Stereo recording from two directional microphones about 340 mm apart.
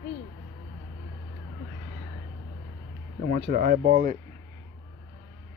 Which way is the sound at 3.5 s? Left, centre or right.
Right.